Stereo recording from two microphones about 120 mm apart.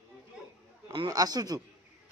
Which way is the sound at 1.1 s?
30° right (ahead or behind).